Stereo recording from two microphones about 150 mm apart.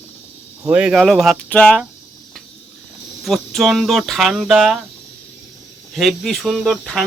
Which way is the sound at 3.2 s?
Centre (ahead or behind).